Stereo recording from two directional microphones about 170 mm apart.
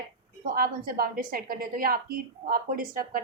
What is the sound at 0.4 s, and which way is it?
A woman's voice, 60° right (ahead or behind).